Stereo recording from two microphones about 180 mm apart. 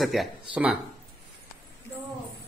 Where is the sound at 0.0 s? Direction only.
Centre (ahead or behind).